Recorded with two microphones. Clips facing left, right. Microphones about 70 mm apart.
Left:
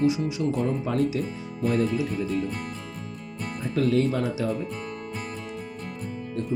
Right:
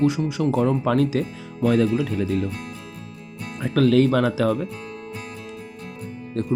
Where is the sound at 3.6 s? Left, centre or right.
Right.